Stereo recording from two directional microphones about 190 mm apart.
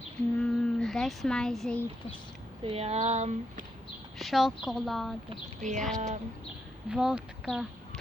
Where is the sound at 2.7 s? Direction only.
35° right (ahead or behind).